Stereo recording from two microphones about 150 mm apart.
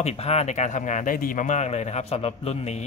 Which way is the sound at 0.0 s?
45° left (ahead or behind).